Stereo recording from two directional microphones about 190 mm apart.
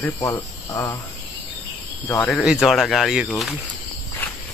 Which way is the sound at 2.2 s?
Centre (ahead or behind).